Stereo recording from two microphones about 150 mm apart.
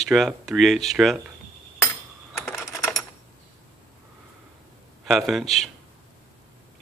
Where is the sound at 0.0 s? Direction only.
Centre (ahead or behind).